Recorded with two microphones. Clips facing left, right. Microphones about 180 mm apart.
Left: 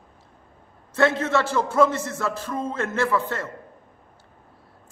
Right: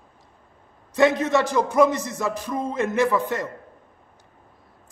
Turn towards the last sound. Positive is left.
turn(degrees=-15)  # may be behind; listen again after turning